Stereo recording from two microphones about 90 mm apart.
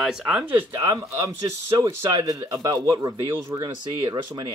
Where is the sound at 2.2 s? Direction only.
40° right (ahead or behind).